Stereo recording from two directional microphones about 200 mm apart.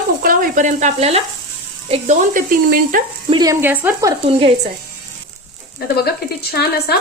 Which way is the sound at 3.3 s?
20° right (ahead or behind).